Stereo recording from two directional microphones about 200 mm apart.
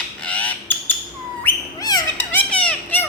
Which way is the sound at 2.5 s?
5° left (ahead or behind).